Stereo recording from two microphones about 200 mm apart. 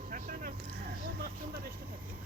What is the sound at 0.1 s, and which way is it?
Vehicle, 45° right (ahead or behind).